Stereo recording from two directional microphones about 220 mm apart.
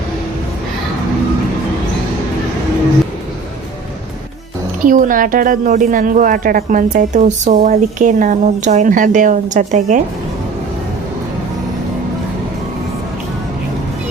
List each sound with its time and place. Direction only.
4.9 s speech: 35° right (ahead or behind)